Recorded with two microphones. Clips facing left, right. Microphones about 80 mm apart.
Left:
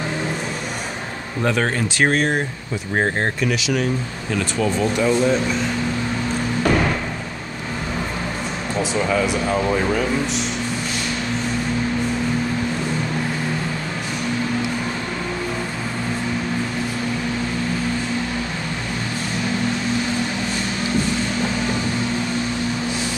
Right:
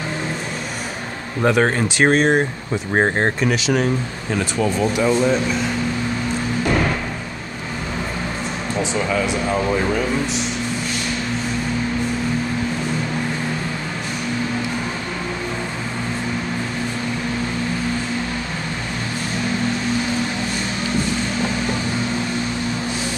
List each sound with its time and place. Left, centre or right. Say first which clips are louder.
1.4 s speech: right 4 dB; centre; by 3.8 s right
4.6 s speech: right 1 dB; centre
8.9 s speech: left 2 dB; centre